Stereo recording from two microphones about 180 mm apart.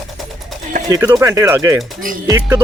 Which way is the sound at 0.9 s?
20° right (ahead or behind).